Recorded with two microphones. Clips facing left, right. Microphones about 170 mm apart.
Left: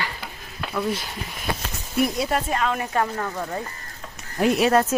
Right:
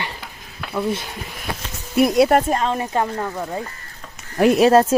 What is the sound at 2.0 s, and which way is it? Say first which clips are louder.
Speech: right 8 dB; 75° right (ahead or behind).